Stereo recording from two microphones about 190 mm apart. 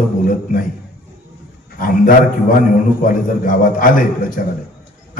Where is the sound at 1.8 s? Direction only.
45° left (ahead or behind).